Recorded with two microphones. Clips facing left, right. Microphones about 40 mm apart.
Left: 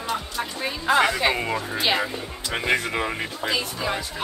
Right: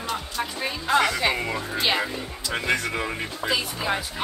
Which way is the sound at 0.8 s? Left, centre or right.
Centre.